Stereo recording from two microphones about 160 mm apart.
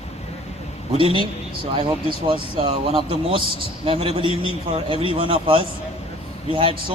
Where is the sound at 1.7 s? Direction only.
35° right (ahead or behind).